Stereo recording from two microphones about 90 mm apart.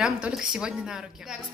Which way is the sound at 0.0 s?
10° right (ahead or behind).